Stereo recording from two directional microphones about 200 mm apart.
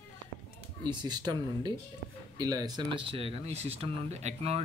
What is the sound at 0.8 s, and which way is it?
Speech, 20° right (ahead or behind).